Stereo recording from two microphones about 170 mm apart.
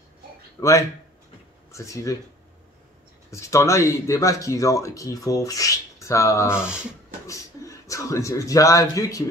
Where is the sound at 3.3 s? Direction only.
15° left (ahead or behind).